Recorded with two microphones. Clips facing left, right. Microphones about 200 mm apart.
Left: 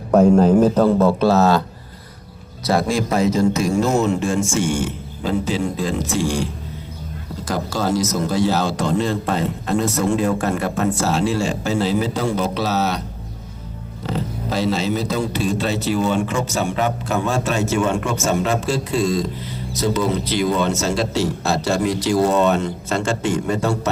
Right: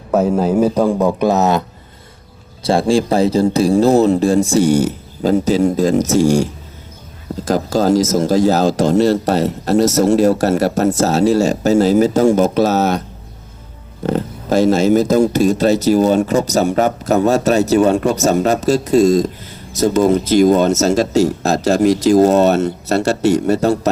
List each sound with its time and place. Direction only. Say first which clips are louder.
0.1 s speech: left 2 dB; 5° right (ahead or behind)
2.6 s speech: right 5 dB; 30° right (ahead or behind)
7.5 s a man's voice: right 7 dB; 40° right (ahead or behind)
14.0 s speech: right 6 dB; 50° right (ahead or behind)